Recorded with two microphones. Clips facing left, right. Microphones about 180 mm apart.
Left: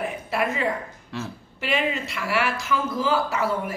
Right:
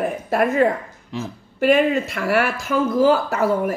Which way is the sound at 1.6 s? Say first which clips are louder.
Right 10 dB; 50° right (ahead or behind).